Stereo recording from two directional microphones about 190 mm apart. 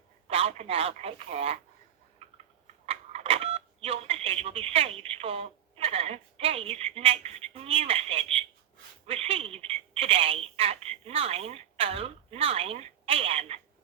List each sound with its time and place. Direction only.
0.3 s speech: 30° right (ahead or behind)
2.8 s speech: 30° right (ahead or behind)